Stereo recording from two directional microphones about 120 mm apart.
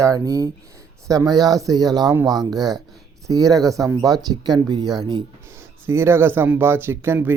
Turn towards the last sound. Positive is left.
turn(degrees=-15)  # may be behind; listen again after turning